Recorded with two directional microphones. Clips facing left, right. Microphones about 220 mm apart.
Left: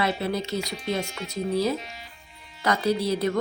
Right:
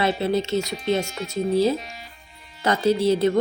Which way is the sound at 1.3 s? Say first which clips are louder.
Right 5 dB; 25° right (ahead or behind).